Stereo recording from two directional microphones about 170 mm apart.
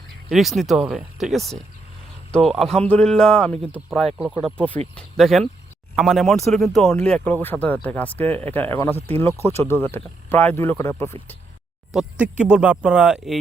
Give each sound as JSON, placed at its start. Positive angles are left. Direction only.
{"t": 0.3, "sound": "speech", "side_deg": 0}
{"t": 11.9, "sound": "speech", "side_deg": -5}